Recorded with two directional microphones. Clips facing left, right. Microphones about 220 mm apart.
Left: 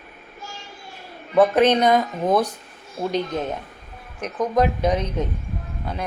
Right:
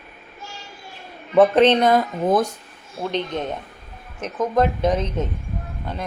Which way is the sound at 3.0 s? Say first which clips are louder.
Left 1 dB; 10° left (ahead or behind).